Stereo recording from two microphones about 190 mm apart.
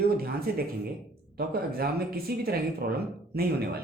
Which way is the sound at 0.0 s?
55° right (ahead or behind).